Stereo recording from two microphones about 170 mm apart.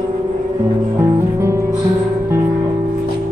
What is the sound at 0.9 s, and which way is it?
Music, 15° right (ahead or behind).